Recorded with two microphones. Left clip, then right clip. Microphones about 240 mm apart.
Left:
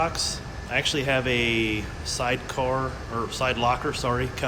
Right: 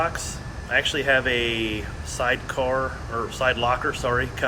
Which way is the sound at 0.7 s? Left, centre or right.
Centre.